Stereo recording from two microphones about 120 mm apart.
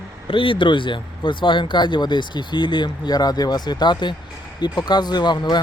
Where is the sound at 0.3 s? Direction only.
45° left (ahead or behind).